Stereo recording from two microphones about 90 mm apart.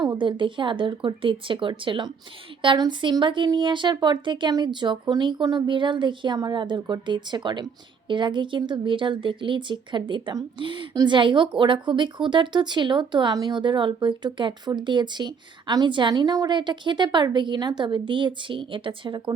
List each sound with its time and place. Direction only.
0.2 s a woman's voice: 65° right (ahead or behind)